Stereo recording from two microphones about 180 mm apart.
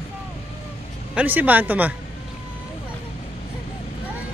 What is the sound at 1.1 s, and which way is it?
Speech, 10° right (ahead or behind).